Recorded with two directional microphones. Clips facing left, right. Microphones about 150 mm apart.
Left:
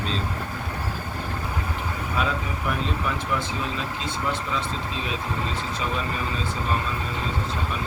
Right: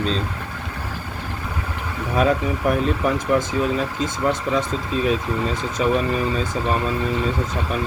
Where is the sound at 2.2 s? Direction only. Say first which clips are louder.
Right 9 dB; 45° right (ahead or behind).